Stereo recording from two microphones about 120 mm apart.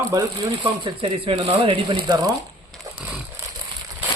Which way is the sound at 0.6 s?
40° right (ahead or behind).